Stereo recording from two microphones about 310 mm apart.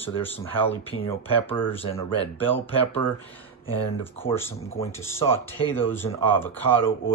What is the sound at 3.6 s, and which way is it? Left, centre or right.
Speech, centre.